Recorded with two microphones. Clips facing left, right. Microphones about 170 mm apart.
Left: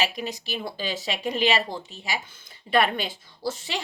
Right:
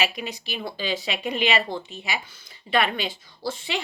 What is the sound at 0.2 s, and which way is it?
A woman's voice, 40° left (ahead or behind).